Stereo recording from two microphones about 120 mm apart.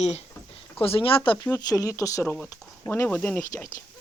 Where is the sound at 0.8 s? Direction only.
50° left (ahead or behind).